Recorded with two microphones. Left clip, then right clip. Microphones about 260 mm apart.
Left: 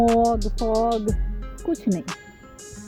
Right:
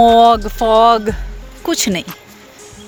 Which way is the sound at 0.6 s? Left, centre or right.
Right.